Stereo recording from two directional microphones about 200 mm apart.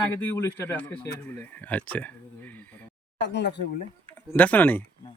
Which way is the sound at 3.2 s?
60° left (ahead or behind).